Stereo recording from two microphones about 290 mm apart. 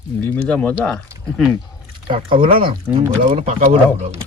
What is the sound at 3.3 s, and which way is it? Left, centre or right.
Speech, right.